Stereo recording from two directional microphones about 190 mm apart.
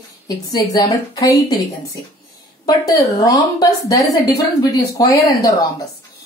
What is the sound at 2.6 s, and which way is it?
A woman's voice, 20° left (ahead or behind).